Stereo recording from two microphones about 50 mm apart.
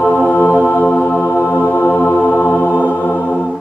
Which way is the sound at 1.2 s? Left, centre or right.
Left.